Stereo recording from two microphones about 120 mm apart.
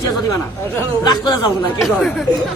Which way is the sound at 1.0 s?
35° left (ahead or behind).